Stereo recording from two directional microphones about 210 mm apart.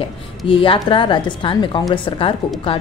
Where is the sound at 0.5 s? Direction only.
25° left (ahead or behind).